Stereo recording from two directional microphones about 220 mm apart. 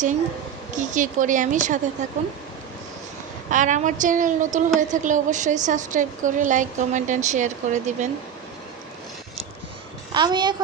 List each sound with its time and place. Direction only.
0.8 s a woman's voice: 35° right (ahead or behind)
3.5 s a woman's voice: 35° right (ahead or behind)
10.2 s speech: 20° right (ahead or behind)